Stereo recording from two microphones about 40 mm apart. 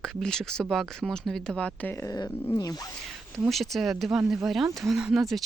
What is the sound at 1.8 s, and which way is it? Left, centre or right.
Speech, left.